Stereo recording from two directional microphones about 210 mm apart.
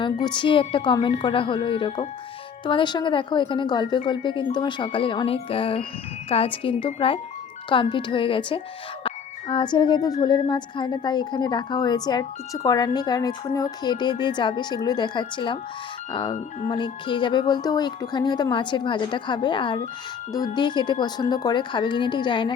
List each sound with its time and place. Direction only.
0.0 s speech: 20° left (ahead or behind)